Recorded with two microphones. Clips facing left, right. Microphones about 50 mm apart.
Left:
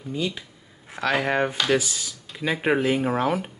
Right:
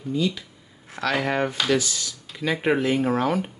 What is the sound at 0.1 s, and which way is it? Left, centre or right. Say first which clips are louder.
Speech: right 3 dB; left.